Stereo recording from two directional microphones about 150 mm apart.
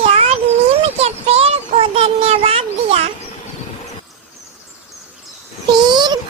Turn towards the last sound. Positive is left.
turn(degrees=-30)  # may be behind; listen again after turning